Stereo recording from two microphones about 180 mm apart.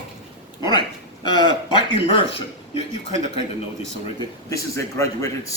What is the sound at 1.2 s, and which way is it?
Speech, 25° left (ahead or behind).